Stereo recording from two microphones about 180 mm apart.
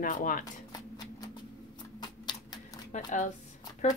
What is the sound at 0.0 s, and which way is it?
Speech, 50° left (ahead or behind).